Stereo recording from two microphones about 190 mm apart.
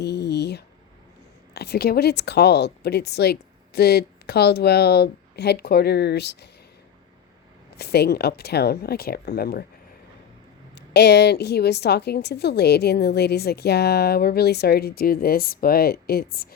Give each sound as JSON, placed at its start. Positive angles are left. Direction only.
{"t": 0.0, "sound": "a sound", "side_deg": 60}
{"t": 1.5, "sound": "a woman's voice", "side_deg": 60}
{"t": 7.8, "sound": "a woman's voice", "side_deg": 55}
{"t": 10.8, "sound": "a woman's voice", "side_deg": 60}